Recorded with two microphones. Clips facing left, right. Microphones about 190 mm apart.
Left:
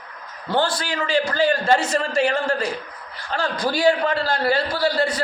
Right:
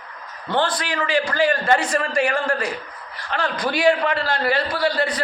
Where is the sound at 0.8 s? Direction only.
25° left (ahead or behind).